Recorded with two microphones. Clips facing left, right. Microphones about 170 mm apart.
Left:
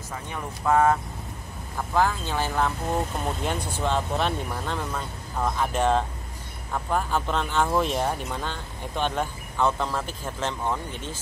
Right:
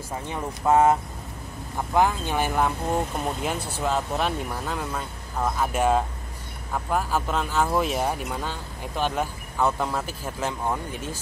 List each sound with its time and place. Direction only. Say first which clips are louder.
0.1 s speech: right 3 dB; 25° right (ahead or behind)
2.0 s speech: right 2 dB; 15° right (ahead or behind)